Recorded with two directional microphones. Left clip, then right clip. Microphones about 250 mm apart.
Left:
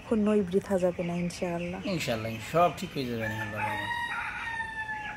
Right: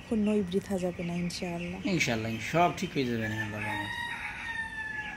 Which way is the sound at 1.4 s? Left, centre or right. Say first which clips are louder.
Left 7 dB; left.